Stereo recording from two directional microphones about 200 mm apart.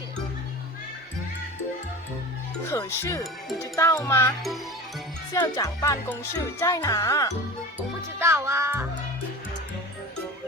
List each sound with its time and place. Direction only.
2.6 s music: 15° left (ahead or behind)
7.8 s speech: 15° right (ahead or behind)